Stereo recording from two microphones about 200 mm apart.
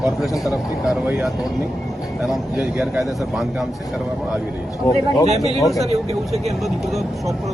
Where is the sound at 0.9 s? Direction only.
5° right (ahead or behind).